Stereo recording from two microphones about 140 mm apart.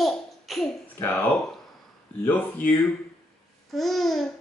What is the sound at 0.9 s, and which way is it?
Speech, 15° left (ahead or behind).